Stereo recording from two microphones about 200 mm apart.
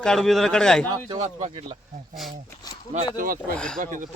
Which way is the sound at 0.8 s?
20° right (ahead or behind).